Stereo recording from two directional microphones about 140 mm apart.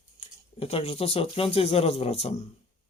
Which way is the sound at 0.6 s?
45° left (ahead or behind).